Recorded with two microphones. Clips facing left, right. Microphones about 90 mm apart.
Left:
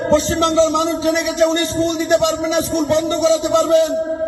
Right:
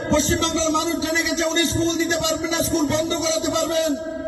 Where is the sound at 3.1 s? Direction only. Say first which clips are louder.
Left 7 dB; 55° left (ahead or behind).